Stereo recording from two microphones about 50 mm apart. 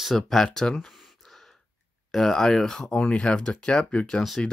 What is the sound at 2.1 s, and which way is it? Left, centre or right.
Speech, centre.